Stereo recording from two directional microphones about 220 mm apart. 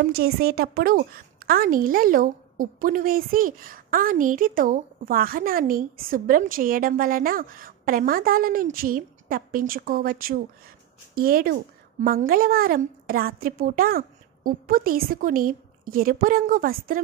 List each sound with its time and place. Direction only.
0.1 s a woman's voice: 45° right (ahead or behind)